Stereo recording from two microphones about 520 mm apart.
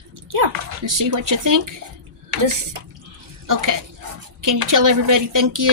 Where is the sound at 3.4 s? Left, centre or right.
Right.